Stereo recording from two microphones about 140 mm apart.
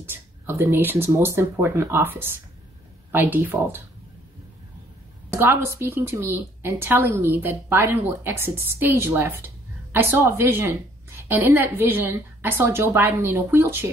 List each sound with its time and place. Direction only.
0.0 s a woman's voice: 15° right (ahead or behind)
5.3 s a woman's voice: 15° right (ahead or behind)